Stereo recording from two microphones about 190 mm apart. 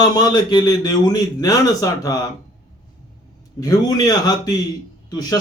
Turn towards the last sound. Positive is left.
turn(degrees=20)  # may be behind; listen again after turning